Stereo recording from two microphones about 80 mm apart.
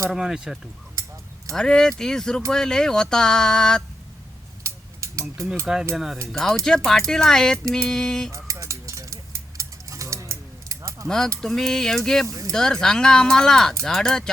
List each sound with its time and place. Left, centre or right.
0.1 s speech: centre
1.5 s speech: centre
4.6 s a sound: right
5.9 s speech: centre
6.2 s speech: centre
8.4 s a sound: right
11.3 s speech: centre